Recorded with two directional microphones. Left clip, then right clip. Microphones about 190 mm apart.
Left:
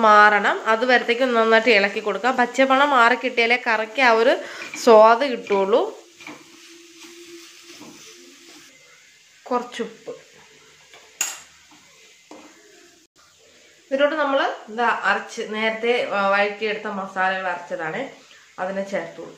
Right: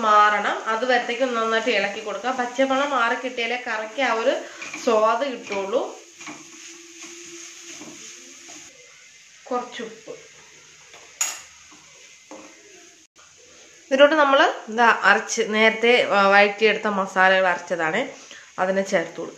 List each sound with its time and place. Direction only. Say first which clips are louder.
0.0 s speech: left 3 dB; 55° left (ahead or behind)
9.8 s speech: left 4 dB; 65° left (ahead or behind)
13.8 s speech: right 4 dB; 30° right (ahead or behind)